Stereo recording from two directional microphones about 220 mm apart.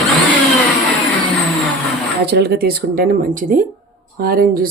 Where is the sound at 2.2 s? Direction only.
50° right (ahead or behind).